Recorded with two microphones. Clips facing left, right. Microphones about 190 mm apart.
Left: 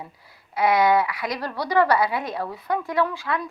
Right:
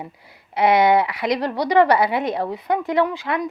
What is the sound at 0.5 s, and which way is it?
A woman's voice, 20° right (ahead or behind).